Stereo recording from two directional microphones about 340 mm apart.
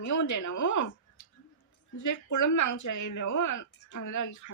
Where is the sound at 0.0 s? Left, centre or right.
Left.